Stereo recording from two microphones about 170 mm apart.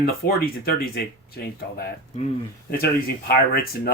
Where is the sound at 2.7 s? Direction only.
65° left (ahead or behind).